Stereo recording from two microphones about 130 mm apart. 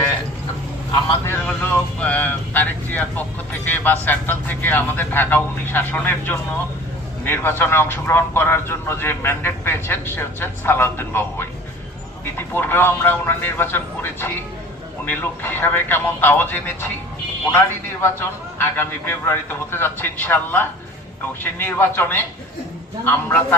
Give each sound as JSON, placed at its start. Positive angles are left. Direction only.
{"t": 1.5, "sound": "speech", "side_deg": 10}
{"t": 18.0, "sound": "speech", "side_deg": 15}